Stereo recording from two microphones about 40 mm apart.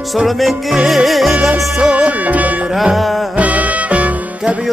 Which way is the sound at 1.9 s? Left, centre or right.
Right.